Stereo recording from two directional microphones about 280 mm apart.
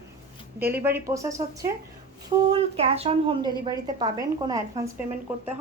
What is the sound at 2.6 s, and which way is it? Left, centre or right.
A woman's voice, right.